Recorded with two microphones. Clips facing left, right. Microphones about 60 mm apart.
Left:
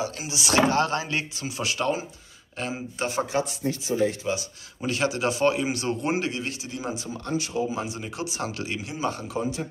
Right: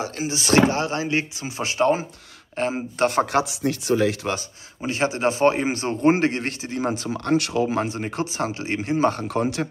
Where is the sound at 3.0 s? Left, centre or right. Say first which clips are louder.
Right 6 dB; right.